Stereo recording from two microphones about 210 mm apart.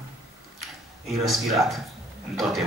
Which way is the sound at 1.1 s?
Centre (ahead or behind).